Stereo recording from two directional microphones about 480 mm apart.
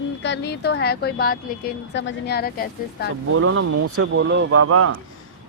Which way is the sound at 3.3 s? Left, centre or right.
Right.